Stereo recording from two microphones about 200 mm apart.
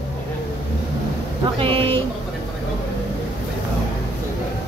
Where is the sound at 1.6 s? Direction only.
30° right (ahead or behind).